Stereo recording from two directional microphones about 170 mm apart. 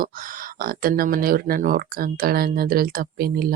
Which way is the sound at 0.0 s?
55° right (ahead or behind).